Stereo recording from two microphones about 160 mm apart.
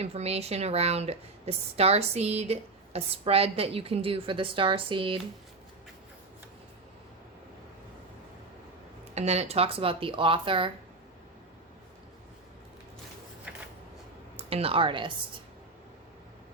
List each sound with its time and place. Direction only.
0.0 s speech: 40° right (ahead or behind)
9.1 s speech: 40° right (ahead or behind)
13.5 s a sound: 10° right (ahead or behind)
14.3 s a woman's voice: 35° right (ahead or behind)